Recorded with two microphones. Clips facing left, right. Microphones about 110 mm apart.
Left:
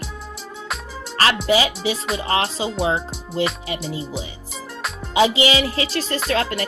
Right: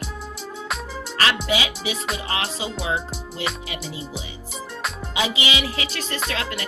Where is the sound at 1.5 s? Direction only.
35° left (ahead or behind).